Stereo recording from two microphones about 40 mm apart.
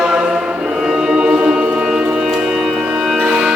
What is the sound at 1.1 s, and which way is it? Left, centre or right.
Music, right.